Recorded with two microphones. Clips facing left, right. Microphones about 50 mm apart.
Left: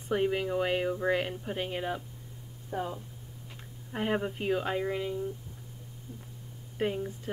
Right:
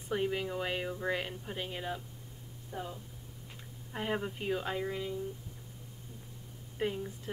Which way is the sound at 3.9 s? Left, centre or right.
Centre.